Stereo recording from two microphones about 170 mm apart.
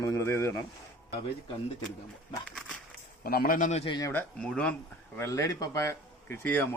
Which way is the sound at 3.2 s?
60° left (ahead or behind).